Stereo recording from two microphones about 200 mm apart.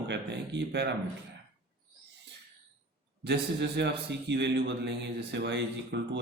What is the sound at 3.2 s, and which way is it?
A man's voice, 60° right (ahead or behind).